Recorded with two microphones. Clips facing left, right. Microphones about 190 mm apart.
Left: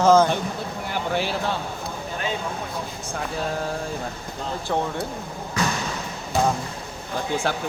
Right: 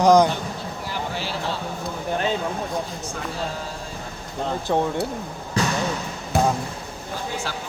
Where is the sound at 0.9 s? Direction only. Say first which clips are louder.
Left 5 dB; 55° left (ahead or behind).